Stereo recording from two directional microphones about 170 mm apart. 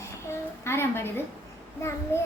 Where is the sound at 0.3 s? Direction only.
15° left (ahead or behind).